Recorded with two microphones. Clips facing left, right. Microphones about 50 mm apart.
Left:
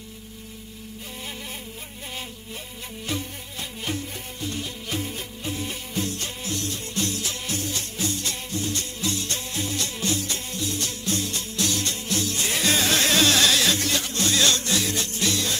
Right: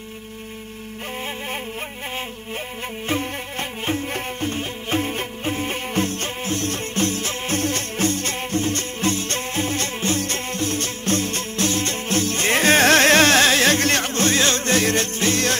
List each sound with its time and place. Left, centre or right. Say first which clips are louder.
3.1 s music: right 7 dB; right